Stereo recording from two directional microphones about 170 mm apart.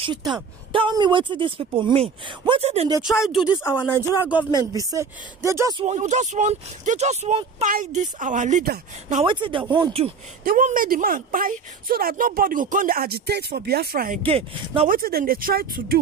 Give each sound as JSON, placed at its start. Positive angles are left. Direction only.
{"t": 0.0, "sound": "speech", "side_deg": -25}
{"t": 3.0, "sound": "speech", "side_deg": 0}
{"t": 3.7, "sound": "speech", "side_deg": 25}
{"t": 4.2, "sound": "speech", "side_deg": -10}
{"t": 4.6, "sound": "speech", "side_deg": -20}
{"t": 5.8, "sound": "speech", "side_deg": -45}
{"t": 9.2, "sound": "speech", "side_deg": -30}
{"t": 10.4, "sound": "a woman's voice", "side_deg": -55}
{"t": 14.2, "sound": "speech", "side_deg": -35}
{"t": 14.9, "sound": "a woman's voice", "side_deg": -60}